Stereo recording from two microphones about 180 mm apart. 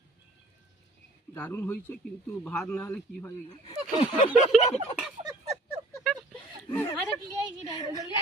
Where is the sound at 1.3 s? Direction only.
10° left (ahead or behind).